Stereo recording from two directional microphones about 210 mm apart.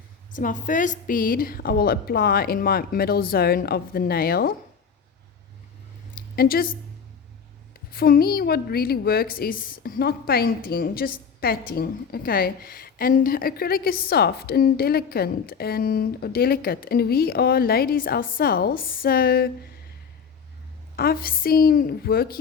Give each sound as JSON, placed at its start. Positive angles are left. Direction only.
{"t": 0.3, "sound": "a woman's voice", "side_deg": 40}
{"t": 6.3, "sound": "a woman's voice", "side_deg": 45}
{"t": 7.9, "sound": "a woman's voice", "side_deg": 45}
{"t": 20.9, "sound": "a woman's voice", "side_deg": 45}